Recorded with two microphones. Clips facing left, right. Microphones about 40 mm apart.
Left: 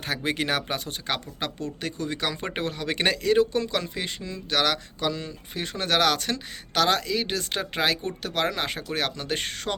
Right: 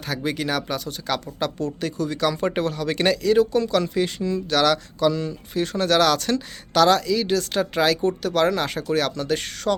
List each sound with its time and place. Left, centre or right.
0.1 s speech: left